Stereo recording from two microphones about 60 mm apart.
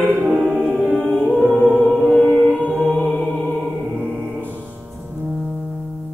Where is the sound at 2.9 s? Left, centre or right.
Left.